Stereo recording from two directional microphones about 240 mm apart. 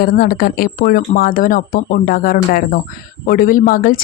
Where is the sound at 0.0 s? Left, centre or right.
Left.